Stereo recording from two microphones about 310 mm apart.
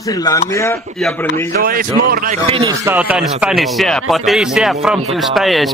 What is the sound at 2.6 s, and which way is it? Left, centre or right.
Speech, centre.